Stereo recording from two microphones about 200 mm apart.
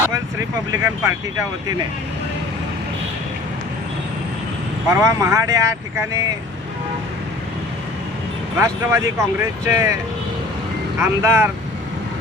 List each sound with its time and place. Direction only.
0.3 s speech: 15° right (ahead or behind)
4.9 s speech: 15° right (ahead or behind)
8.5 s speech: 15° right (ahead or behind)
11.0 s speech: 10° right (ahead or behind)